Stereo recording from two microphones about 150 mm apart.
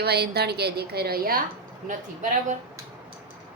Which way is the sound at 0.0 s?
90° right.